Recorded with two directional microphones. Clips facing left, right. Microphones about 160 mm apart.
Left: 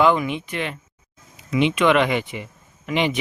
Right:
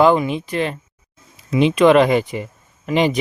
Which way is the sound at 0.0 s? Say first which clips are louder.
Right 4 dB; 35° right (ahead or behind).